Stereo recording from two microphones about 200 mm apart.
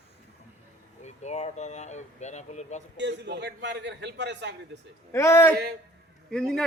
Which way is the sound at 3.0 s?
60° right (ahead or behind).